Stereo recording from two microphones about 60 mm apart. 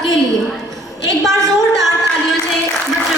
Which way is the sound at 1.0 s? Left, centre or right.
Right.